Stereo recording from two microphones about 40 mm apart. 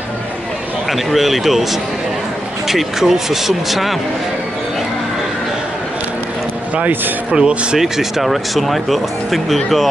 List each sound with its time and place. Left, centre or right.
0.8 s speech: centre
7.2 s speech: right
7.8 s speech: centre